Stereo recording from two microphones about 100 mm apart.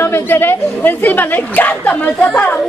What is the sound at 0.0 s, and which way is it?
A woman's voice, 25° left (ahead or behind).